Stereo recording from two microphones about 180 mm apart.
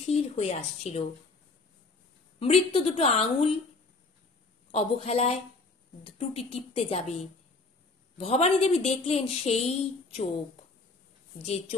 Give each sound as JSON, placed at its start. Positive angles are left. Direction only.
{"t": 0.0, "sound": "a woman's voice", "side_deg": 35}
{"t": 2.4, "sound": "a woman's voice", "side_deg": 30}
{"t": 4.6, "sound": "a woman's voice", "side_deg": 35}
{"t": 8.2, "sound": "a woman's voice", "side_deg": 35}
{"t": 11.3, "sound": "a woman's voice", "side_deg": 35}